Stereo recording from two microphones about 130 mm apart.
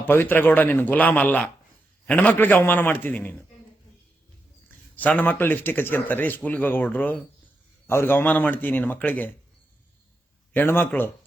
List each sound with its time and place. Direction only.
0.0 s speech: 15° left (ahead or behind)
4.9 s speech: 10° left (ahead or behind)
10.5 s speech: 15° left (ahead or behind)